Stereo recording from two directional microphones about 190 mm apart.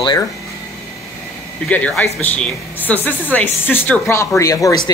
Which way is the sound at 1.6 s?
5° left (ahead or behind).